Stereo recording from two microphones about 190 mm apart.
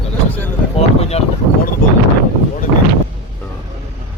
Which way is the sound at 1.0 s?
35° left (ahead or behind).